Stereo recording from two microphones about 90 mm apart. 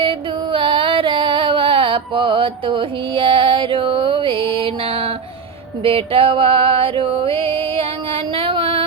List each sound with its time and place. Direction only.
0.0 s music: 75° right (ahead or behind)
5.8 s a sound: 90° right
7.6 s music: 90° right